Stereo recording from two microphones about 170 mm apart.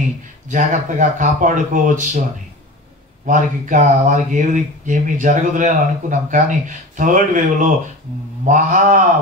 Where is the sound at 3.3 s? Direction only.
50° right (ahead or behind).